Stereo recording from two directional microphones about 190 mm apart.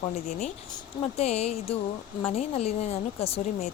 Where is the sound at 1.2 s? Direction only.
35° left (ahead or behind).